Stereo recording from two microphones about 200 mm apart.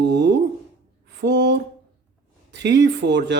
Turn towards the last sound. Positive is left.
turn(degrees=-60)  # may be behind; listen again after turning